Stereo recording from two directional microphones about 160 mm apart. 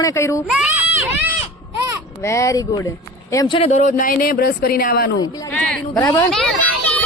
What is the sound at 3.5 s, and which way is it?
Speech, 45° left (ahead or behind).